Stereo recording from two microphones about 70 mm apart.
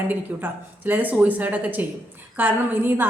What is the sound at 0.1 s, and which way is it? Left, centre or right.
A woman's voice, right.